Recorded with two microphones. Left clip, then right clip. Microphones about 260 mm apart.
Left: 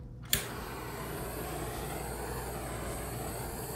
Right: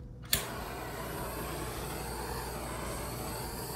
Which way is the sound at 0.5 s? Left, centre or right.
Centre.